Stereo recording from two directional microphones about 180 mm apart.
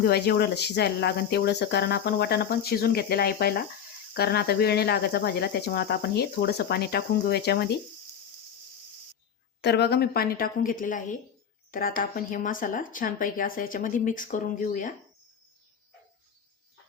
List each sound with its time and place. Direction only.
0.0 s speech: 65° left (ahead or behind)
9.6 s speech: 65° left (ahead or behind); by 14.9 s 45° left (ahead or behind)